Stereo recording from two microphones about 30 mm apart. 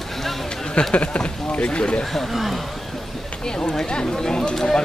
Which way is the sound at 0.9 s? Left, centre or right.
Left.